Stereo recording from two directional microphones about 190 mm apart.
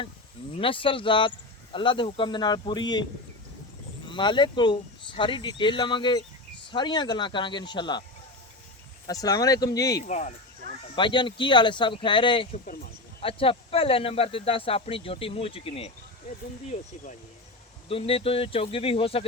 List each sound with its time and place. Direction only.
0.5 s speech: 30° left (ahead or behind)
9.0 s speech: 20° left (ahead or behind)
10.0 s speech: 40° left (ahead or behind)
10.9 s speech: 25° left (ahead or behind)
16.6 s speech: 40° left (ahead or behind)
17.8 s speech: 30° left (ahead or behind)